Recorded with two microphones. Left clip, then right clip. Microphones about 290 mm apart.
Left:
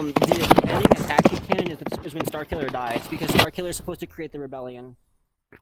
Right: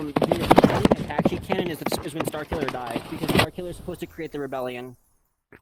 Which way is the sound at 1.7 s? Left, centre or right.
Centre.